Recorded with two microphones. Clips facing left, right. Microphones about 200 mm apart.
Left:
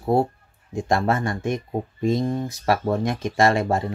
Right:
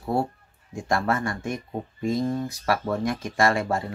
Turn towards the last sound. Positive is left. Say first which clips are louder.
# left 3 dB
turn(degrees=25)  # may be behind; listen again after turning